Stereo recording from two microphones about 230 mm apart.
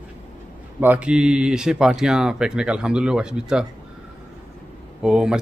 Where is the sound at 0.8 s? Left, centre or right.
Centre.